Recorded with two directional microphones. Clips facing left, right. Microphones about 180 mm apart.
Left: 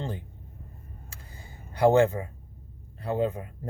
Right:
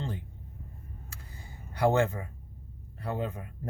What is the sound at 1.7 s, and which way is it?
Speech, 25° left (ahead or behind).